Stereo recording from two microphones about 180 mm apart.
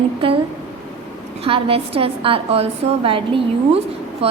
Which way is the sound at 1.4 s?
30° right (ahead or behind).